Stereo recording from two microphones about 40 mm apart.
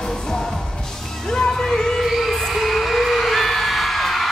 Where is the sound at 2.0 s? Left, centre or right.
Centre.